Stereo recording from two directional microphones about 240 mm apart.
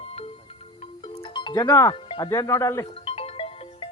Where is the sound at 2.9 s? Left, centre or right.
Left.